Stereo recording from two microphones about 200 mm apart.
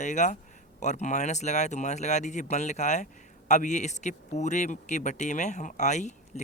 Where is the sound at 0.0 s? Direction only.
35° left (ahead or behind).